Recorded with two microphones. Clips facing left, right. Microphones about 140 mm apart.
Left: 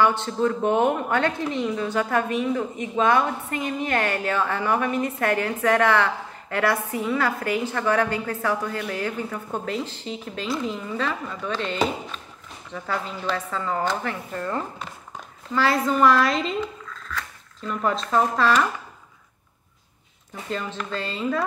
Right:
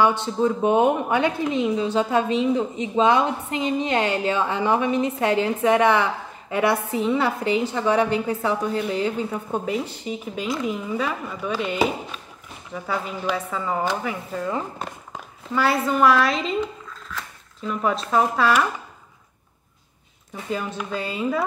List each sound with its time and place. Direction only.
0.0 s a woman's voice: 15° right (ahead or behind)
17.6 s a woman's voice: 5° right (ahead or behind)
20.4 s a woman's voice: 10° right (ahead or behind)